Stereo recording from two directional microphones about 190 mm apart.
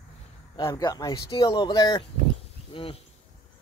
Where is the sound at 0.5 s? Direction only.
20° left (ahead or behind).